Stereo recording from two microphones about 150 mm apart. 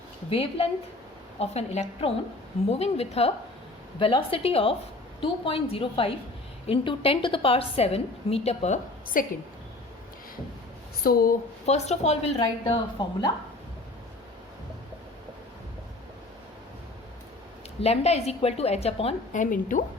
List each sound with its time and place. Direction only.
0.3 s a woman's voice: 40° left (ahead or behind)
9.2 s a woman's voice: 65° left (ahead or behind)
11.0 s speech: 75° left (ahead or behind)
11.6 s a woman's voice: 45° left (ahead or behind)
17.8 s a woman's voice: 45° left (ahead or behind)
19.3 s a woman's voice: 60° left (ahead or behind)